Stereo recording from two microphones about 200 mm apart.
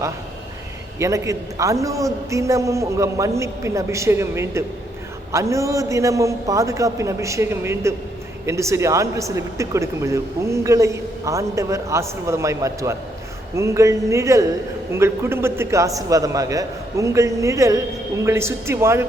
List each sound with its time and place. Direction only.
0.9 s speech: 15° right (ahead or behind)